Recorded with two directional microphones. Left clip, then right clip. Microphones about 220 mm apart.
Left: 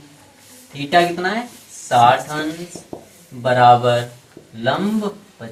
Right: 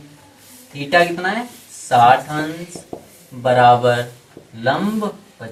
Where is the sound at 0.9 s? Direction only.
15° left (ahead or behind).